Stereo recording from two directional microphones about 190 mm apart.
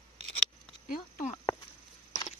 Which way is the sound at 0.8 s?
45° left (ahead or behind).